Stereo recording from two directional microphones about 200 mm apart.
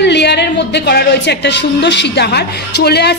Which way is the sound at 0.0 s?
60° left (ahead or behind).